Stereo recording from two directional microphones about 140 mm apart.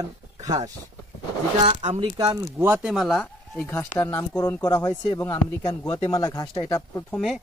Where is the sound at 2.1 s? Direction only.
30° right (ahead or behind).